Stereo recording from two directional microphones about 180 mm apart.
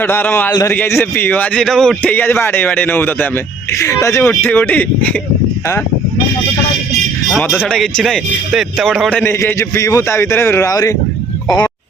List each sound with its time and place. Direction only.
0.0 s a man's voice: 10° left (ahead or behind)
7.5 s a man's voice: 5° left (ahead or behind)
9.3 s a man's voice: 15° left (ahead or behind)